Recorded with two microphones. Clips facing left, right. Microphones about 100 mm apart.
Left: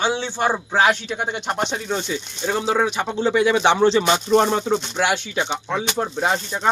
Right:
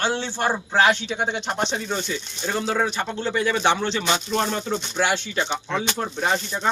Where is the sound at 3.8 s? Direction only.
30° left (ahead or behind).